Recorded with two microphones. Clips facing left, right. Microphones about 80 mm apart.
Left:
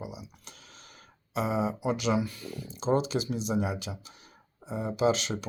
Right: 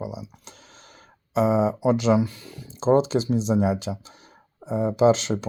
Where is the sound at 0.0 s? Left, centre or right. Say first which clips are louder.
Right 8 dB; right.